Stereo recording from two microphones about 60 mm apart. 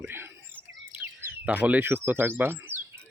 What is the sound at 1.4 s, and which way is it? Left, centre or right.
Speech, right.